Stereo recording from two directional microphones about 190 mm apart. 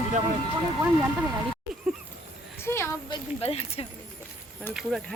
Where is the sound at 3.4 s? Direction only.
35° left (ahead or behind).